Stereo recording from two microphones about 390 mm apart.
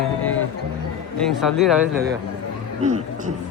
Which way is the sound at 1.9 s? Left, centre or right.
Right.